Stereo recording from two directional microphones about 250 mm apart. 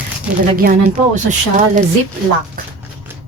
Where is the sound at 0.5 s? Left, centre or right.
Right.